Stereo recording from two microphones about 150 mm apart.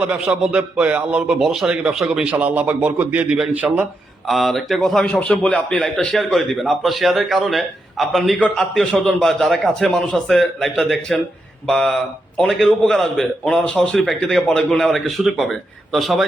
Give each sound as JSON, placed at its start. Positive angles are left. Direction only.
{"t": 0.0, "sound": "a man's voice", "side_deg": -5}